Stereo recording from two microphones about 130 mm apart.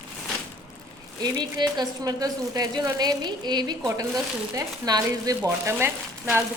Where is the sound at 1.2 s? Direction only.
35° right (ahead or behind).